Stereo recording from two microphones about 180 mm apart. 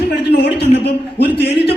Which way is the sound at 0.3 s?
65° left (ahead or behind).